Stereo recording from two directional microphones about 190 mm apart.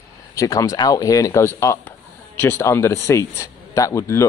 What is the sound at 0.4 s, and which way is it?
Speech, 20° left (ahead or behind).